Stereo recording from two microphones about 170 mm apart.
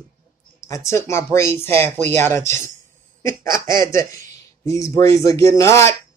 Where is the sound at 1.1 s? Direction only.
15° left (ahead or behind).